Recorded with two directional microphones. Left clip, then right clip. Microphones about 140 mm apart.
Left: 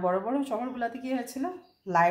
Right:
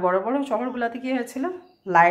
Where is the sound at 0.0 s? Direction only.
15° right (ahead or behind).